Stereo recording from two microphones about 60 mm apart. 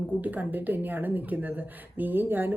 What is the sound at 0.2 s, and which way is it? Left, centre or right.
Speech, right.